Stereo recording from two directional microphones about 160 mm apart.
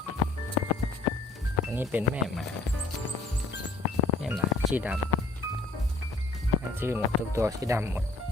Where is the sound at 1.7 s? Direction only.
10° right (ahead or behind).